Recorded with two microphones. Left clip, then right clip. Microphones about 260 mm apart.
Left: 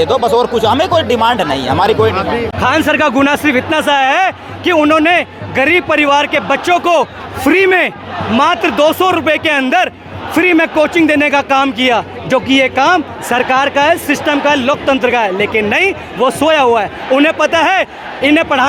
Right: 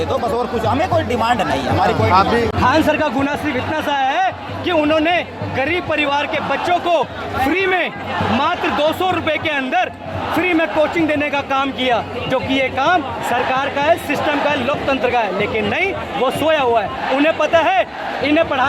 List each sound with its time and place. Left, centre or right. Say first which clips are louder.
0.0 s a man's voice: left 8 dB; left